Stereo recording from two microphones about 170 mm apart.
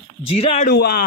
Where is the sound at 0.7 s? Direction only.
60° left (ahead or behind).